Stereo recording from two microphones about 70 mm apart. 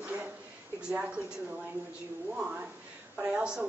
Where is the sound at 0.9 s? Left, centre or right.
Centre.